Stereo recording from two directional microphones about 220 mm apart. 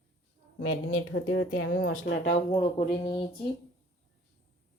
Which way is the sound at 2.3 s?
25° left (ahead or behind).